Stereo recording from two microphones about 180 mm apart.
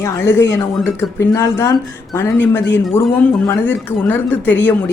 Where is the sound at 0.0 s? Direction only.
15° left (ahead or behind).